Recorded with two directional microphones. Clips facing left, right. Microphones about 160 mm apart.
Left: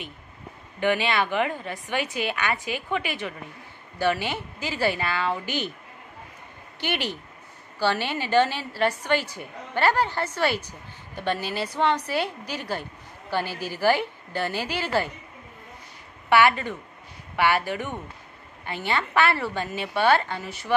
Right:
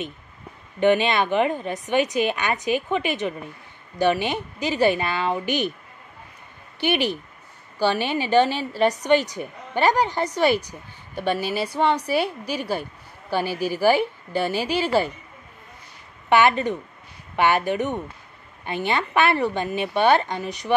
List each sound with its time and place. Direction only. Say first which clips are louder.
0.7 s a woman's voice: right 5 dB; 20° right (ahead or behind)
6.8 s a woman's voice: right 7 dB; 15° right (ahead or behind)
16.3 s a woman's voice: right 2 dB; 20° right (ahead or behind)